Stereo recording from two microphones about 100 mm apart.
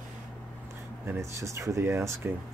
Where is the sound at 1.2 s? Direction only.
30° right (ahead or behind).